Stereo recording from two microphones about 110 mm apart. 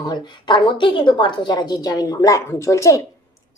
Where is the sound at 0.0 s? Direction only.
40° left (ahead or behind).